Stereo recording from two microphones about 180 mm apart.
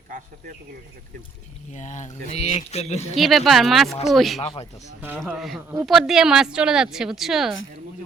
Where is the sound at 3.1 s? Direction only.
Centre (ahead or behind).